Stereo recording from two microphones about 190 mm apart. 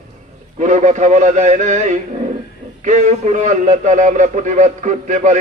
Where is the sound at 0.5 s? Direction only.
40° right (ahead or behind).